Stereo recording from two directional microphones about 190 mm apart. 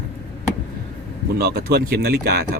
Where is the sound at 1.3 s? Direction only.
55° right (ahead or behind).